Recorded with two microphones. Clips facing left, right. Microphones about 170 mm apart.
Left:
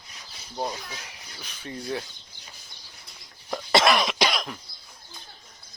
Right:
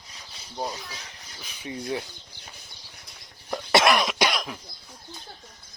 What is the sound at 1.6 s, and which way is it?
Speech, 15° right (ahead or behind).